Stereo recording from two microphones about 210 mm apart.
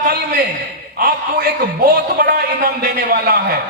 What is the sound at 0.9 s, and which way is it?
A man's voice, 45° right (ahead or behind).